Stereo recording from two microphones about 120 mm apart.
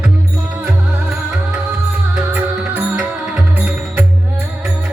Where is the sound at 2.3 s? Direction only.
15° right (ahead or behind).